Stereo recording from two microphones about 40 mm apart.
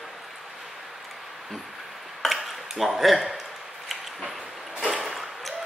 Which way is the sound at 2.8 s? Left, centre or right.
Centre.